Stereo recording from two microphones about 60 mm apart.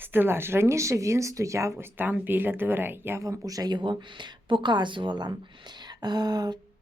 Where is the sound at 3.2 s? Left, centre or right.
Right.